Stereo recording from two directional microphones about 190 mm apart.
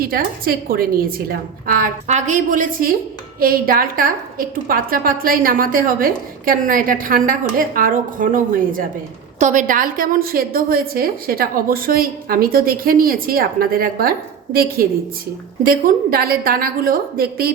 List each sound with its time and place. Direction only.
0.0 s a woman's voice: 50° right (ahead or behind)